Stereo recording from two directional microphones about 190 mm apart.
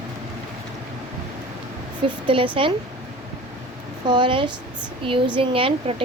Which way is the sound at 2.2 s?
25° right (ahead or behind).